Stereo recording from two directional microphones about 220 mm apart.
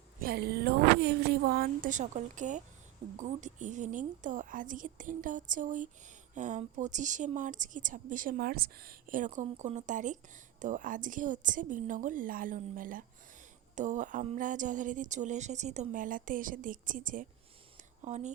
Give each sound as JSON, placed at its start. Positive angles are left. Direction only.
{"t": 0.2, "sound": "a woman's voice", "side_deg": -45}